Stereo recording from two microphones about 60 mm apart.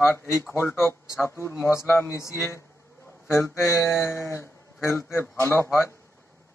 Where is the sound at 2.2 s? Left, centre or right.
Left.